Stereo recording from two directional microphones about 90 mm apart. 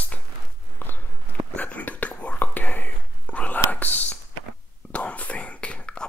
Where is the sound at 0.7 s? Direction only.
20° left (ahead or behind).